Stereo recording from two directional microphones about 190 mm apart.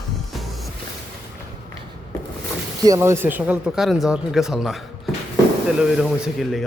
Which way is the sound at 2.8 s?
15° right (ahead or behind).